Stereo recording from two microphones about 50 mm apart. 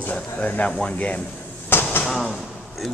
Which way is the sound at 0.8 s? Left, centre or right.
Left.